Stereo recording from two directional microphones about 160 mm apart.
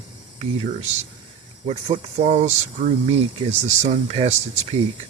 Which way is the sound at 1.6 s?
45° right (ahead or behind).